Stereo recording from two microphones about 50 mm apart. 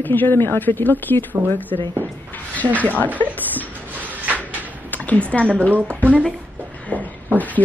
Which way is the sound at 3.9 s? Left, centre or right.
Right.